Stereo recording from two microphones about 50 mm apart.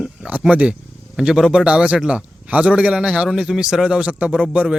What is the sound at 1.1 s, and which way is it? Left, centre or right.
A man's voice, centre.